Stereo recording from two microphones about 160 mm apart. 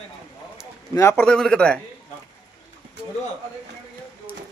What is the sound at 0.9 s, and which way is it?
Speech, 15° left (ahead or behind).